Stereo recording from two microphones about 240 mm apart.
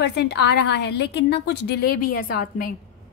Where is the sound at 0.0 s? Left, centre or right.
Left.